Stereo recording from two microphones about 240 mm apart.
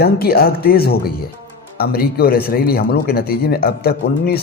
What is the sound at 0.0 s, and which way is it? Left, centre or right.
Speech, left.